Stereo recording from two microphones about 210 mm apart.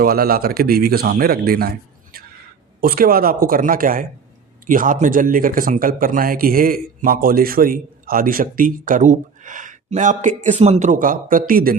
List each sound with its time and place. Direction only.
0.0 s speech: 45° right (ahead or behind)
2.8 s speech: 45° right (ahead or behind)